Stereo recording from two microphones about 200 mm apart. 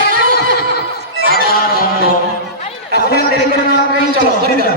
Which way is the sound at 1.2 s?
50° right (ahead or behind).